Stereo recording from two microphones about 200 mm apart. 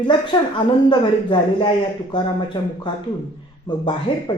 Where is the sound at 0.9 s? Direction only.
25° left (ahead or behind).